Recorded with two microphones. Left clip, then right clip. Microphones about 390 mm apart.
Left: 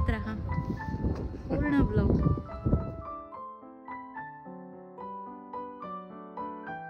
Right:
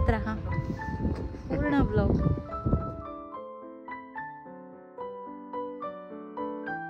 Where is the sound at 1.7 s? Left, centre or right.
Centre.